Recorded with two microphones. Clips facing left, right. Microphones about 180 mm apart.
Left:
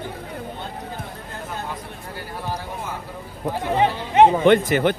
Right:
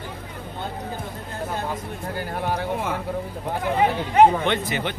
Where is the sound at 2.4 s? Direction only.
65° right (ahead or behind).